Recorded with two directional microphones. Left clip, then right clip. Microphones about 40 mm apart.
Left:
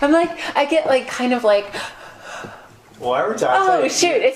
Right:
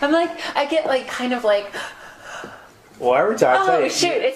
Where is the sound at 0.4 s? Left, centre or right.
Left.